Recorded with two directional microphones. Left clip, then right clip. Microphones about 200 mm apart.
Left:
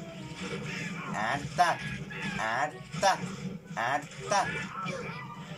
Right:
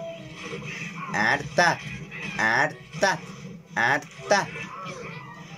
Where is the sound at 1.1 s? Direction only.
45° right (ahead or behind).